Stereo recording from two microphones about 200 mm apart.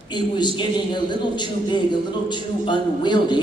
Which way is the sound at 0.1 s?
20° left (ahead or behind).